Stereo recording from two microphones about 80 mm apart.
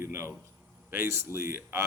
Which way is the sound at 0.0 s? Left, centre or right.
Right.